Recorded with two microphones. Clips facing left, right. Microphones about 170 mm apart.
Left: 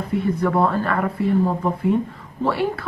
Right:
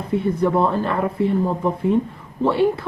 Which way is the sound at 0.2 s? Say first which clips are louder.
Even; 20° right (ahead or behind).